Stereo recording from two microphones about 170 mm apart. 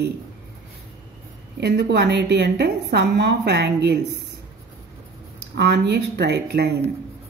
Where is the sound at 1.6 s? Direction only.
80° right.